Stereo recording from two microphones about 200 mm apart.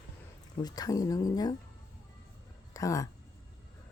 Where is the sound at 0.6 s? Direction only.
20° left (ahead or behind).